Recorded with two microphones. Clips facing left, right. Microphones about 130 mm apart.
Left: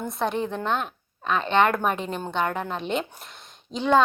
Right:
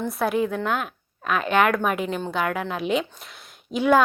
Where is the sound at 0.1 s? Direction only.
5° right (ahead or behind).